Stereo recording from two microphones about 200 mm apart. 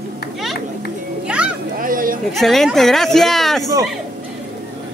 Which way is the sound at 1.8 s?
45° right (ahead or behind).